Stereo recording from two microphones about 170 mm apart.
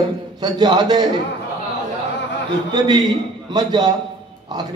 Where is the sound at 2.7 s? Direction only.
25° right (ahead or behind).